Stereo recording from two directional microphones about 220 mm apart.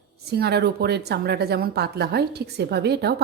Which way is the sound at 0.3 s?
45° right (ahead or behind).